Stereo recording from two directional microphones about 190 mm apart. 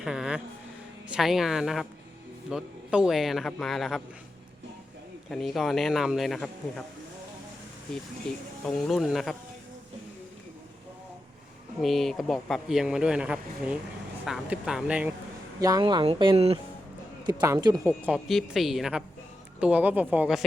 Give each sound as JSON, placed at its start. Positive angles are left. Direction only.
{"t": 0.0, "sound": "music", "side_deg": -5}
{"t": 1.0, "sound": "speech", "side_deg": -5}
{"t": 5.3, "sound": "speech", "side_deg": 0}
{"t": 8.3, "sound": "speech", "side_deg": 0}
{"t": 11.8, "sound": "speech", "side_deg": 0}
{"t": 15.6, "sound": "speech", "side_deg": -20}
{"t": 17.2, "sound": "speech", "side_deg": -20}
{"t": 18.0, "sound": "speech", "side_deg": 0}